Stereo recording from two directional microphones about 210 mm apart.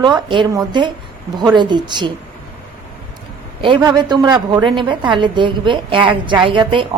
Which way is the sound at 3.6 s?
20° right (ahead or behind).